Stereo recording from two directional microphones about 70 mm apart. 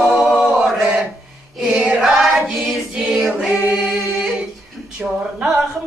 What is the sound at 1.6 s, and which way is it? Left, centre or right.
Choir, centre.